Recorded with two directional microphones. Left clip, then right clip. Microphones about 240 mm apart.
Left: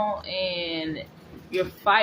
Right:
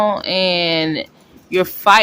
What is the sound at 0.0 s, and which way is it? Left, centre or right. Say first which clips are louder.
Speech: right 11 dB; right.